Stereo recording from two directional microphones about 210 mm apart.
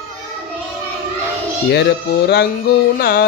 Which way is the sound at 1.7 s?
55° left (ahead or behind).